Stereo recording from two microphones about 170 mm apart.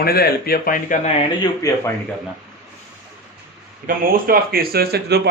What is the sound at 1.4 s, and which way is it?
Speech, 20° left (ahead or behind).